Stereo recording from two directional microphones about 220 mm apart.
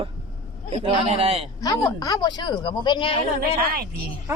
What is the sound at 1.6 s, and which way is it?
Speech, 15° left (ahead or behind).